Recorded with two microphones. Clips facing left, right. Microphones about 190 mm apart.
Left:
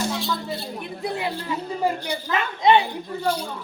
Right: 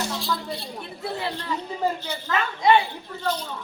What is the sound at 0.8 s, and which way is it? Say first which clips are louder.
A woman's voice: left 3 dB; 15° left (ahead or behind).